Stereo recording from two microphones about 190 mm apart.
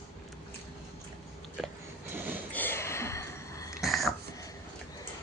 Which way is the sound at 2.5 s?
10° left (ahead or behind).